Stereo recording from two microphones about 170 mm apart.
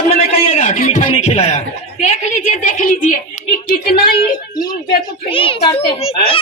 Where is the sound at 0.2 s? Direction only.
60° left (ahead or behind).